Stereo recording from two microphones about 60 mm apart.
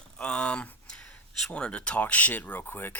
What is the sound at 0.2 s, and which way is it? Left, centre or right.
A man's voice, centre.